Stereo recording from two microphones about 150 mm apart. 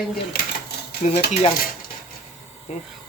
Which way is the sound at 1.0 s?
55° left (ahead or behind).